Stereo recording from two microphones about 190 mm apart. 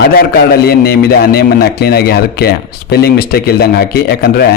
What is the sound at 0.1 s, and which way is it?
Speech, 55° left (ahead or behind).